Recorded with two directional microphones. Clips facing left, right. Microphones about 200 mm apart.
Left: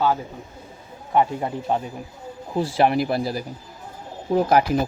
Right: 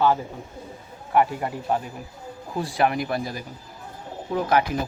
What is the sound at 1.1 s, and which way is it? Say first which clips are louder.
Speech: left 1 dB; 25° left (ahead or behind).